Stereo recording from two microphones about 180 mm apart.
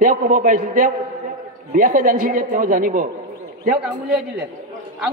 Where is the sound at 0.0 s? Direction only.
45° right (ahead or behind).